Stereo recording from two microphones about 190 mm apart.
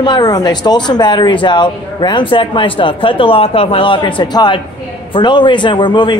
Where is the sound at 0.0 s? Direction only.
20° left (ahead or behind).